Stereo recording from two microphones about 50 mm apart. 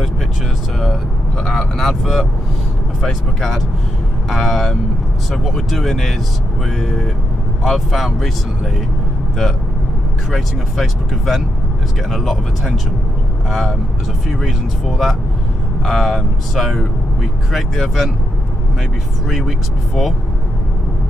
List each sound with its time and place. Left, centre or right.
1.4 s vehicle: centre
1.8 s vehicle: centre
3.0 s speech: centre
10.3 s speech: centre
16.5 s speech: centre
19.2 s speech: centre